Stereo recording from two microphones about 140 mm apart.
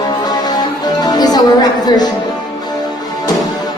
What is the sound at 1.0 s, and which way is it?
Music, 30° left (ahead or behind).